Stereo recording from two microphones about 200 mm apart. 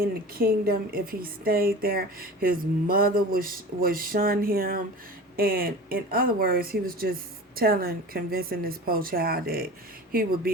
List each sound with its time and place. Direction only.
0.3 s a woman's voice: 45° right (ahead or behind)